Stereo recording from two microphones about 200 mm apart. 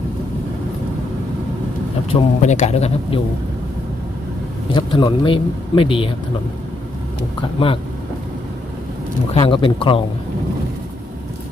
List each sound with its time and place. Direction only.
2.0 s a man's voice: 30° left (ahead or behind)
4.7 s speech: 25° left (ahead or behind)
9.3 s speech: 25° left (ahead or behind)